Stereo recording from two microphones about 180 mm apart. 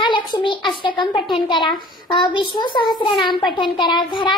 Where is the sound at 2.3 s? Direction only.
25° left (ahead or behind).